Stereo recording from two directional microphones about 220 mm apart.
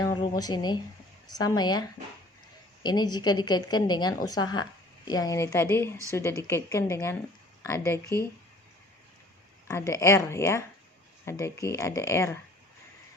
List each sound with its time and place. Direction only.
0.0 s a woman's voice: 15° left (ahead or behind)
2.8 s a woman's voice: 20° left (ahead or behind)
9.6 s a woman's voice: 15° left (ahead or behind)